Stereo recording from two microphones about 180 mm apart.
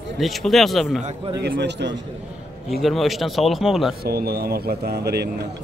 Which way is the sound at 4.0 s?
60° right (ahead or behind).